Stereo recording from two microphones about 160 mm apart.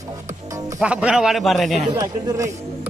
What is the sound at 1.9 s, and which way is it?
Speech, 20° right (ahead or behind).